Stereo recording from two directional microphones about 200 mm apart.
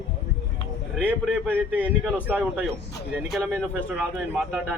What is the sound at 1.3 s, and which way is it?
A man's voice, 10° right (ahead or behind).